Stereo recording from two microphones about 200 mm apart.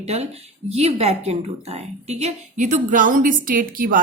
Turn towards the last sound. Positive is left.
turn(degrees=-45)  # may be behind; listen again after turning